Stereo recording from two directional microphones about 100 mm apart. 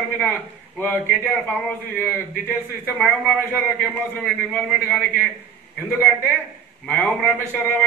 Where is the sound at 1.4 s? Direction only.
15° left (ahead or behind).